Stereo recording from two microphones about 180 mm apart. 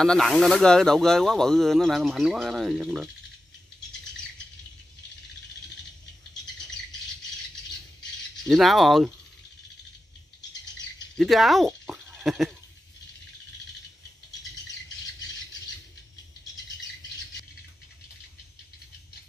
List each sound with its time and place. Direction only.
0.0 s speech: 5° left (ahead or behind)
8.5 s speech: centre (ahead or behind)
11.1 s speech: centre (ahead or behind)